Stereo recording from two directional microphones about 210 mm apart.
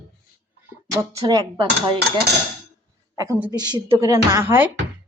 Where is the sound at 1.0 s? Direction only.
15° right (ahead or behind).